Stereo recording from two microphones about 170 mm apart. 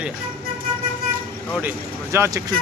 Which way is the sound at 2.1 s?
20° right (ahead or behind).